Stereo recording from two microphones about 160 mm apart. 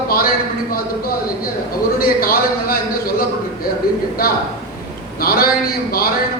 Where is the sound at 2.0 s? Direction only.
65° left (ahead or behind).